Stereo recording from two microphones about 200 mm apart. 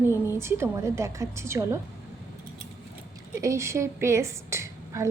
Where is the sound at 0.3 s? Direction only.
10° right (ahead or behind).